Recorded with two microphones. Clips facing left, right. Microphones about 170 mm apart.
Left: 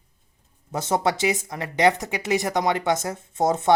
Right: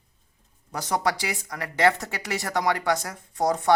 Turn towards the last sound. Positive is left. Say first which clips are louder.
# left 2 dB
turn(degrees=25)  # may be behind; listen again after turning